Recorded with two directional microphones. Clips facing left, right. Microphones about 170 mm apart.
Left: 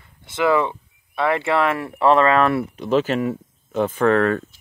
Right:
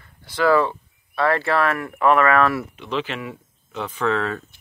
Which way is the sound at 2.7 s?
40° left (ahead or behind).